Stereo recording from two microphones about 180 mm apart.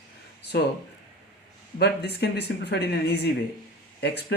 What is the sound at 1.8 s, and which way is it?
Speech, 65° left (ahead or behind).